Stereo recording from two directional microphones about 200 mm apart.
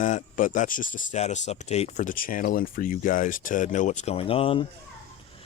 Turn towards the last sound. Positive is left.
turn(degrees=25)  # may be behind; listen again after turning